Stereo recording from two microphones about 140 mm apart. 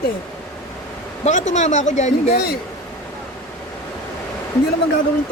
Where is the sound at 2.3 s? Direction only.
90° left.